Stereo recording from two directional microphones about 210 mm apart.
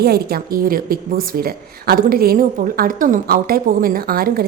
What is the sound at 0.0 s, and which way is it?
Speech, 45° right (ahead or behind).